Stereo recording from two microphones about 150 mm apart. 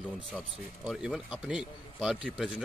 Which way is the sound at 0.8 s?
5° right (ahead or behind).